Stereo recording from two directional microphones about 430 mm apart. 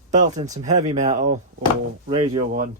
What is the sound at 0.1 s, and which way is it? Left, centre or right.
Speech, centre.